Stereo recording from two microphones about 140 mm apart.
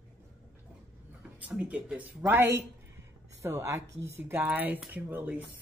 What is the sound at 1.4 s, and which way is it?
Speech, 5° right (ahead or behind).